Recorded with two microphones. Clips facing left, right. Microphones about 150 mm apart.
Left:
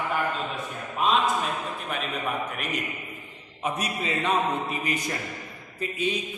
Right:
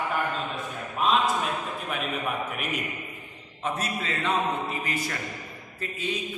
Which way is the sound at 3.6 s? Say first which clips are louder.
Left 1 dB; 15° left (ahead or behind).